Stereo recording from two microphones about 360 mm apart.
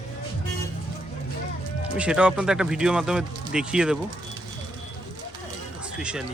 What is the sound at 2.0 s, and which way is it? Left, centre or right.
Speech, centre.